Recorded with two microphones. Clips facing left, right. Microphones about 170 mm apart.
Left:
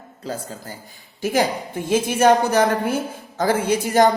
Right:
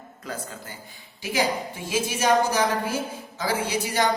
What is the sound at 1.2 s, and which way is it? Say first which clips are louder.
A woman's voice: left 5 dB; 50° left (ahead or behind).